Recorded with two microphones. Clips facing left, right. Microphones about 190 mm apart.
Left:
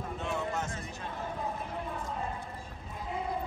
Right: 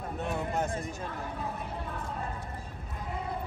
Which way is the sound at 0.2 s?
35° right (ahead or behind).